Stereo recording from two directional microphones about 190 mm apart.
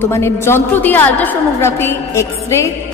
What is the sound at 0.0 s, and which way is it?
A woman's voice, 15° left (ahead or behind).